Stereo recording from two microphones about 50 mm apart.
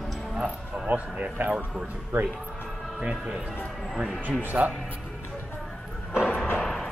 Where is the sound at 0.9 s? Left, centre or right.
Right.